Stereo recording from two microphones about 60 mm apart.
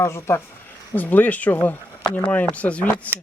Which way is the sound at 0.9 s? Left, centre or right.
Left.